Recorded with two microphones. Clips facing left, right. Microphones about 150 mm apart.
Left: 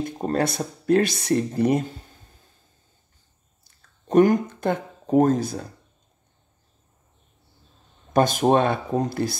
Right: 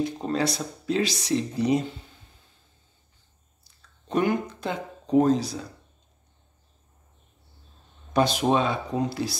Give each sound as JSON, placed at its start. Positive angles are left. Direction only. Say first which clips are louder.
{"t": 0.0, "sound": "speech", "louder": "left 2 dB", "side_deg": 50}
{"t": 3.6, "sound": "speech", "louder": "left 5 dB", "side_deg": 45}
{"t": 8.1, "sound": "speech", "louder": "left 4 dB", "side_deg": 50}